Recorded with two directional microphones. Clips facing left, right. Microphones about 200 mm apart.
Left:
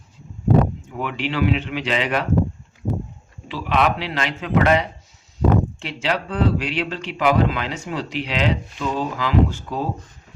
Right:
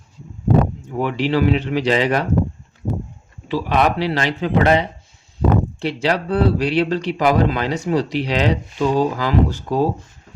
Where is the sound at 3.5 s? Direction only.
40° right (ahead or behind).